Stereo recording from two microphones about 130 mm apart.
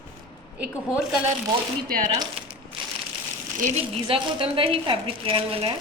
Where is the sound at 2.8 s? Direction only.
40° right (ahead or behind).